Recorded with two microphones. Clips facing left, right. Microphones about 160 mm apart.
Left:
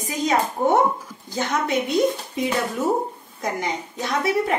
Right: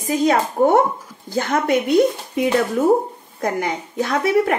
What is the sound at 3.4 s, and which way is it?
A woman's voice, 55° right (ahead or behind).